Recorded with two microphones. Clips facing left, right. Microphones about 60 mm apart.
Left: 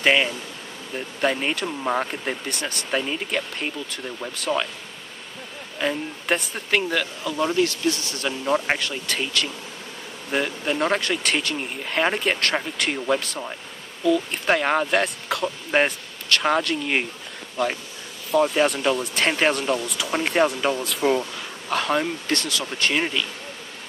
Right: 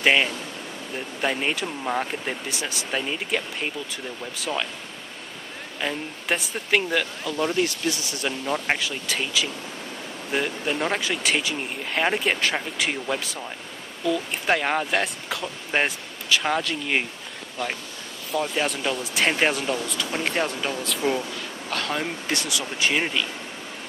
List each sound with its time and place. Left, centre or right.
0.0 s speech: centre
1.8 s speech: centre
2.0 s speech: centre
5.8 s speech: centre
7.9 s speech: centre
8.3 s speech: centre
14.0 s speech: centre
15.7 s vehicle: centre
16.6 s speech: centre
18.3 s speech: centre
22.0 s speech: centre